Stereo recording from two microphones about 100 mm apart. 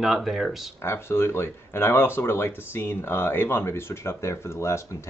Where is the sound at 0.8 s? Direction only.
25° left (ahead or behind).